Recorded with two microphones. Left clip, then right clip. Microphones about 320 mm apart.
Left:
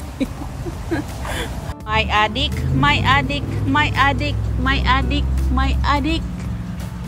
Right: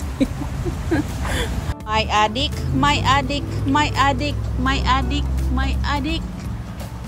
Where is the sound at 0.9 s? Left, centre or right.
Centre.